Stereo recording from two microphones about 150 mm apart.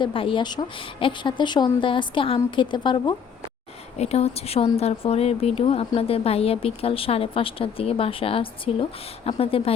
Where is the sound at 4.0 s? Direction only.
45° left (ahead or behind).